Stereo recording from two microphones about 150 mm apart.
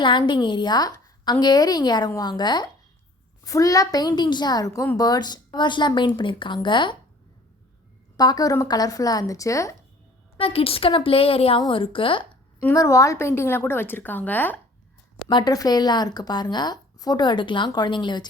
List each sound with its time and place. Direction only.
0.0 s a woman's voice: 35° left (ahead or behind)
8.1 s a woman's voice: 25° left (ahead or behind)
10.3 s a woman's voice: 40° left (ahead or behind)
12.7 s a woman's voice: 20° left (ahead or behind)
15.3 s a woman's voice: 30° left (ahead or behind)